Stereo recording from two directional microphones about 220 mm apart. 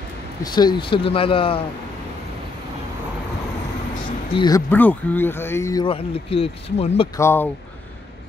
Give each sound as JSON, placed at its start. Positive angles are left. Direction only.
{"t": 0.4, "sound": "speech", "side_deg": 20}
{"t": 4.3, "sound": "speech", "side_deg": 20}
{"t": 7.2, "sound": "speech", "side_deg": 10}